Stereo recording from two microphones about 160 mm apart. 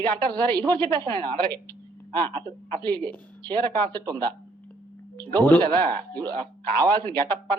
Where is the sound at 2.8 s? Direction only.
25° right (ahead or behind).